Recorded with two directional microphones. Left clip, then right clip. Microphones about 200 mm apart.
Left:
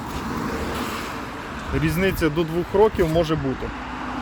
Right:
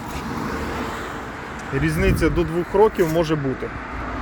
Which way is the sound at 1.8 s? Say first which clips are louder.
Right 1 dB; centre (ahead or behind).